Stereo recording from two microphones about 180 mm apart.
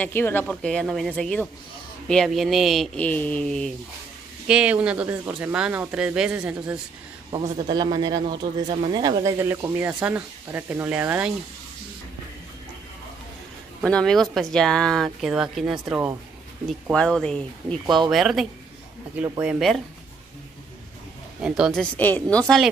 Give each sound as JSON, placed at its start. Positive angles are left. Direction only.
{"t": 0.0, "sound": "speech", "side_deg": 10}
{"t": 4.5, "sound": "speech", "side_deg": -5}
{"t": 7.6, "sound": "speech", "side_deg": -25}
{"t": 13.8, "sound": "speech", "side_deg": 5}
{"t": 21.4, "sound": "speech", "side_deg": -5}
{"t": 21.9, "sound": "speech", "side_deg": 10}